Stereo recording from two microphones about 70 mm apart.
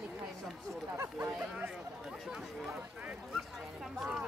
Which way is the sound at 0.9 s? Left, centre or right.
Right.